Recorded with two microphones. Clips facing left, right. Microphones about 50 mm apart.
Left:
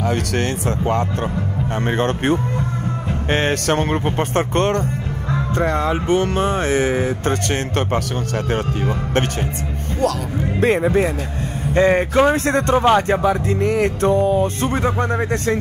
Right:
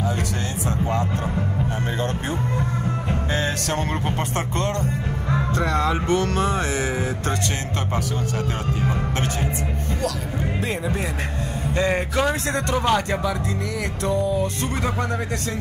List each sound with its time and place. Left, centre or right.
0.7 s speech: left
3.3 s speech: left
5.5 s speech: left
10.6 s speech: left